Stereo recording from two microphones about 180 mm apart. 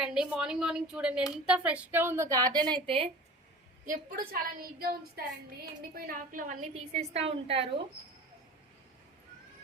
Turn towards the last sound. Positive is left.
turn(degrees=-30)  # may be behind; listen again after turning